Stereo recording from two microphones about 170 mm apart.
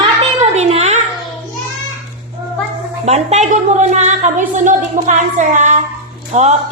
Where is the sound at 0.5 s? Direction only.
40° right (ahead or behind).